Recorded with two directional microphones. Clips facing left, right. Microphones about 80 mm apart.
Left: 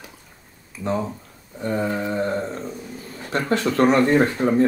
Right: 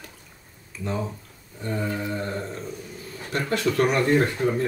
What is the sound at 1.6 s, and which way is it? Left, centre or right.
Speech, left.